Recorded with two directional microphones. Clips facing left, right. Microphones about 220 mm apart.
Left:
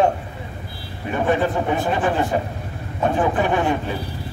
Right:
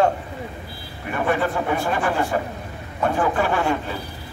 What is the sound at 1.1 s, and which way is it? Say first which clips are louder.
A man's voice: left 2 dB; 20° left (ahead or behind).